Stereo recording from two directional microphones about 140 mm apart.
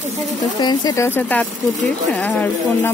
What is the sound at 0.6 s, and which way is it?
A woman's voice, 25° left (ahead or behind).